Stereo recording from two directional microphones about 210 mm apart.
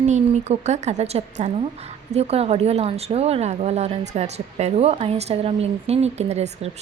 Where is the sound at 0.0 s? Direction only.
35° right (ahead or behind).